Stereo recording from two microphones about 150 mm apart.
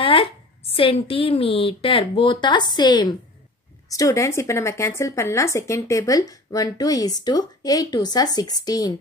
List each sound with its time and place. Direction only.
0.0 s a woman's voice: 40° left (ahead or behind)